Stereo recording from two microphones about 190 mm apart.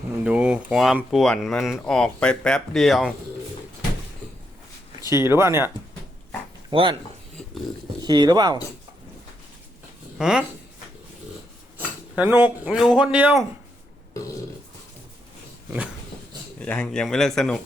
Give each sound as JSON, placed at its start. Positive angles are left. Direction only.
{"t": 0.3, "sound": "speech", "side_deg": -5}
{"t": 4.9, "sound": "speech", "side_deg": -15}
{"t": 6.7, "sound": "speech", "side_deg": -25}
{"t": 8.0, "sound": "speech", "side_deg": -20}
{"t": 10.2, "sound": "speech", "side_deg": -5}
{"t": 11.8, "sound": "speech", "side_deg": -10}
{"t": 16.6, "sound": "speech", "side_deg": 5}